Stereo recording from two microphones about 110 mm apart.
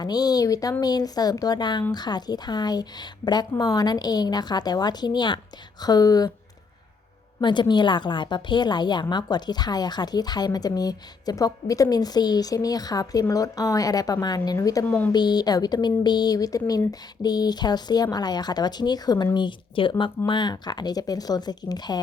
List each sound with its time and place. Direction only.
0.0 s a woman's voice: 35° left (ahead or behind)
7.4 s a woman's voice: 45° left (ahead or behind)
14.8 s speech: 15° left (ahead or behind)
15.1 s a woman's voice: 40° left (ahead or behind)